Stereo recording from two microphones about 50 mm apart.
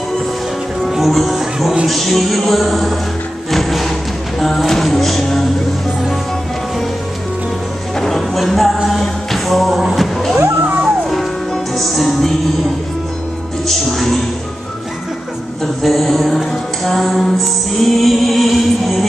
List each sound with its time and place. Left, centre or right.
0.8 s speech: centre
1.4 s a sound: centre
1.9 s music: centre
8.0 s music: centre
10.6 s music: right
11.1 s music: centre
13.7 s music: centre
15.6 s music: centre